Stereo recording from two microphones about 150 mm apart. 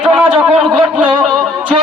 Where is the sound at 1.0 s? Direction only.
10° right (ahead or behind).